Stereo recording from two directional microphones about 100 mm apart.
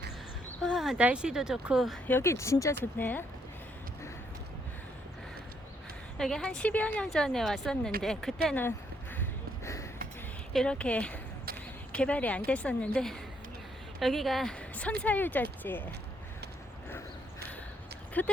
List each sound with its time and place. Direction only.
0.6 s a sound: centre (ahead or behind)
1.0 s speech: 10° right (ahead or behind)
2.0 s speech: 25° left (ahead or behind)
3.0 s speech: 20° left (ahead or behind)
6.1 s a woman's voice: 5° left (ahead or behind)
10.5 s a woman's voice: 5° left (ahead or behind)
14.8 s a woman's voice: 15° left (ahead or behind)
18.2 s a woman's voice: 15° left (ahead or behind)